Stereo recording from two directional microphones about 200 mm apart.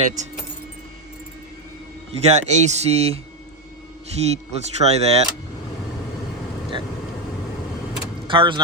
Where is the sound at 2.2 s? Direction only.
35° right (ahead or behind).